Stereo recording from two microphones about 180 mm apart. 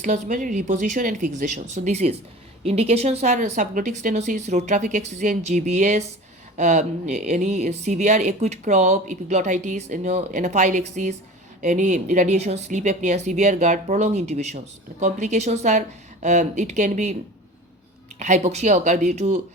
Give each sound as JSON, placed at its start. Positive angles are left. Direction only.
{"t": 0.0, "sound": "speech", "side_deg": -45}
{"t": 18.2, "sound": "speech", "side_deg": -40}